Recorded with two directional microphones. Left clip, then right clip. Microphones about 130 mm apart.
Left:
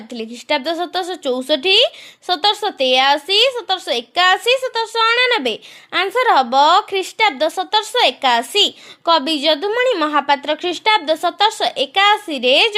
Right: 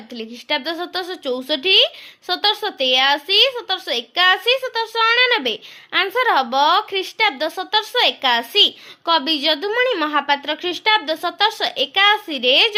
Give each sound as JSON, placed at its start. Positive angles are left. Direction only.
{"t": 0.1, "sound": "speech", "side_deg": 50}